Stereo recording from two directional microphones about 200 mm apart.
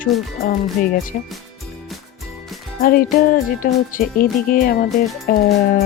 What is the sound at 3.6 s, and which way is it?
Speech, 45° left (ahead or behind).